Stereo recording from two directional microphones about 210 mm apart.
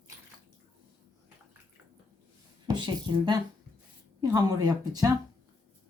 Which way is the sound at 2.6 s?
20° right (ahead or behind).